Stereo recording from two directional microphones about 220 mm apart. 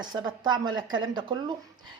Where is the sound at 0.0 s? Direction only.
20° right (ahead or behind).